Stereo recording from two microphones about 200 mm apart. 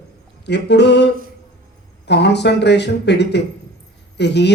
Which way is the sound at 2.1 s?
60° left (ahead or behind).